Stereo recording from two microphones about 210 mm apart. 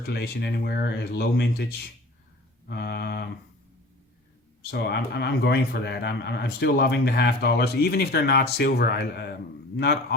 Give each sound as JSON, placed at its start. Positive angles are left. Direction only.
{"t": 0.0, "sound": "a man's voice", "side_deg": 50}
{"t": 2.6, "sound": "a man's voice", "side_deg": 50}
{"t": 4.7, "sound": "a man's voice", "side_deg": 50}